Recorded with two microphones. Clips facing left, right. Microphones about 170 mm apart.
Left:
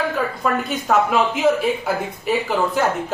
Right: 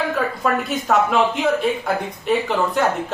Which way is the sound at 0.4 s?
Centre (ahead or behind).